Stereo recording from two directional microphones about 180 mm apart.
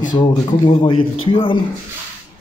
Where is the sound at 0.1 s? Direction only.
25° left (ahead or behind).